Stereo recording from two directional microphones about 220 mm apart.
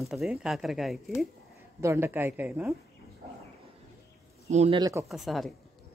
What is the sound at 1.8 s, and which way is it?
Speech, 10° right (ahead or behind).